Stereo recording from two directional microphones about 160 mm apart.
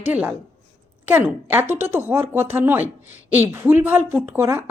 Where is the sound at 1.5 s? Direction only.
15° right (ahead or behind).